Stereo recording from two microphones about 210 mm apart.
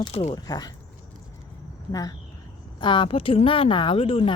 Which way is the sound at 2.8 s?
20° left (ahead or behind).